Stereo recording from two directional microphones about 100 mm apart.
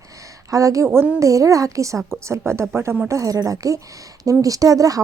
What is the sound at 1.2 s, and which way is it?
A woman's voice, 35° right (ahead or behind).